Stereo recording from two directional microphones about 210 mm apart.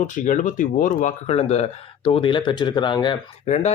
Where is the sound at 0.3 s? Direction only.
40° left (ahead or behind); by 3.5 s 20° left (ahead or behind).